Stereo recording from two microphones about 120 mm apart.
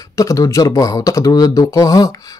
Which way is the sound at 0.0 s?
30° left (ahead or behind).